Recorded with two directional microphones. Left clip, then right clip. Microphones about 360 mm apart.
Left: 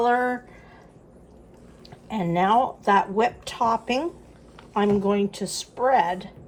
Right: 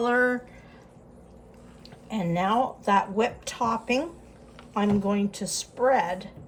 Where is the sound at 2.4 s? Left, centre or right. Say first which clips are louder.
Left 5 dB; centre.